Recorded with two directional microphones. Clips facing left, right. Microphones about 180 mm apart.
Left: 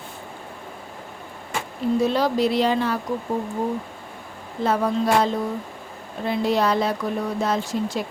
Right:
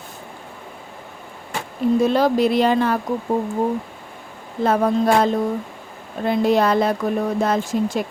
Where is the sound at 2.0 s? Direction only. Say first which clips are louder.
Right 3 dB; 50° right (ahead or behind).